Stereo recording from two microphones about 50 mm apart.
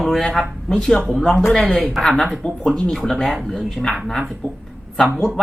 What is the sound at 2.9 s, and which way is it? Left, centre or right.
Speech, centre.